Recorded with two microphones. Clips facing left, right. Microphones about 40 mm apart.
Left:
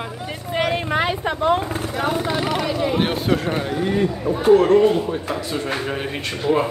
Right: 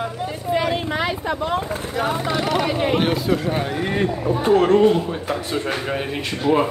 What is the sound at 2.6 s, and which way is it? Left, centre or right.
Speech, right.